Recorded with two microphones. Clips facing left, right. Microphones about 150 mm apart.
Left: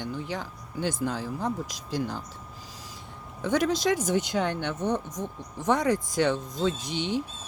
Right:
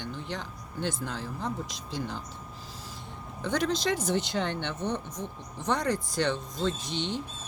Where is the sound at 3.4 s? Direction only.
10° left (ahead or behind).